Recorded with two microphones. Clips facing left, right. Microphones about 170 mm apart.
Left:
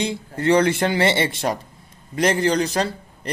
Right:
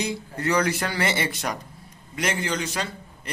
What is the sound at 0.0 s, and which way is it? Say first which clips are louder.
A man's voice: left 5 dB; 25° left (ahead or behind).